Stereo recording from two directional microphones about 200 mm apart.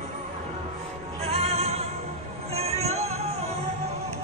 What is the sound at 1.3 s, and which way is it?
Music, 30° right (ahead or behind).